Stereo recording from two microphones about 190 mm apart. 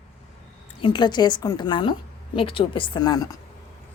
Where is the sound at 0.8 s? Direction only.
25° left (ahead or behind).